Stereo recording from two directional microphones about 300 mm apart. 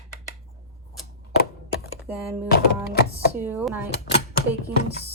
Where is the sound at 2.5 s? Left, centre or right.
Left.